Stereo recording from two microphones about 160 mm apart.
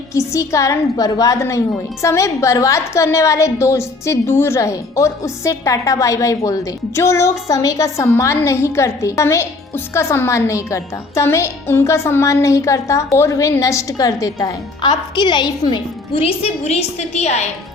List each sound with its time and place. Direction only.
0.1 s a woman's voice: 20° left (ahead or behind); by 17.4 s 45° left (ahead or behind)